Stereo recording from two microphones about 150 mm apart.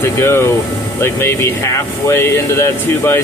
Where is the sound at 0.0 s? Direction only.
15° left (ahead or behind).